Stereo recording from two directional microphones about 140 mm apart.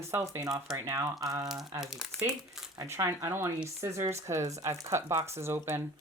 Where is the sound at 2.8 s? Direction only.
20° right (ahead or behind).